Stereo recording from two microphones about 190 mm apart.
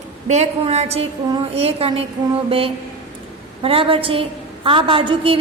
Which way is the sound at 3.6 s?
30° right (ahead or behind).